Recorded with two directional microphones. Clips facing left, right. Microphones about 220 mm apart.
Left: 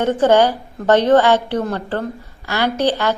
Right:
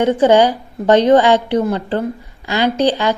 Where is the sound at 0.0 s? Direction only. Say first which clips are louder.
Right 2 dB; 15° right (ahead or behind).